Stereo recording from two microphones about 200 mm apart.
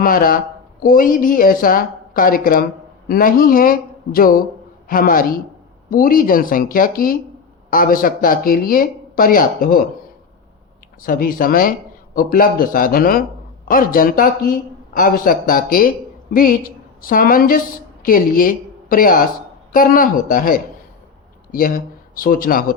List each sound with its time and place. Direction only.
0.0 s speech: 45° left (ahead or behind)
11.0 s a woman's voice: 45° left (ahead or behind)
22.1 s speech: 45° left (ahead or behind)